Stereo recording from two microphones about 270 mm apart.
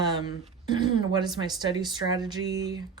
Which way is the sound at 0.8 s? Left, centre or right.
Centre.